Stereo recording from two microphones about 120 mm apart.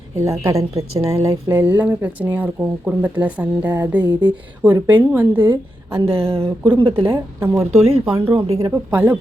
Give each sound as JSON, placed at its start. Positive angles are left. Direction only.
{"t": 0.2, "sound": "a woman's voice", "side_deg": -25}
{"t": 4.0, "sound": "speech", "side_deg": -40}
{"t": 4.9, "sound": "a woman's voice", "side_deg": -15}
{"t": 6.1, "sound": "speech", "side_deg": -50}
{"t": 6.4, "sound": "a woman's voice", "side_deg": -20}
{"t": 8.4, "sound": "speech", "side_deg": -30}
{"t": 8.7, "sound": "speech", "side_deg": -15}